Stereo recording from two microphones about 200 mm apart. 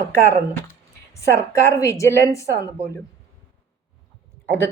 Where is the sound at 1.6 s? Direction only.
15° left (ahead or behind).